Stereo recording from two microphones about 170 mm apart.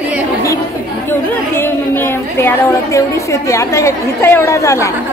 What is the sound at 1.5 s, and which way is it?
A woman's voice, 15° left (ahead or behind).